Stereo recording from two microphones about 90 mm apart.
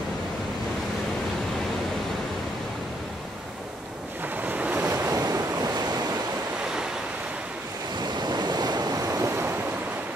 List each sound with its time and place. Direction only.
4.4 s waves: 20° right (ahead or behind)
5.1 s waves: 40° right (ahead or behind)
8.0 s waves: 50° right (ahead or behind); by 9.6 s 25° right (ahead or behind)